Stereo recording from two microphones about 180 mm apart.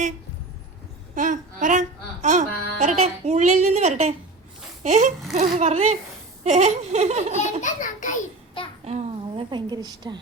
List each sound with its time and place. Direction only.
1.1 s a woman's voice: 45° right (ahead or behind)
7.6 s a child's voice: 45° left (ahead or behind)
8.8 s a woman's voice: 35° right (ahead or behind)